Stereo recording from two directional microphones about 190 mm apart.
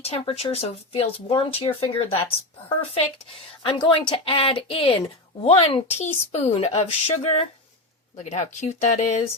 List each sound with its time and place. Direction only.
0.0 s speech: 30° left (ahead or behind)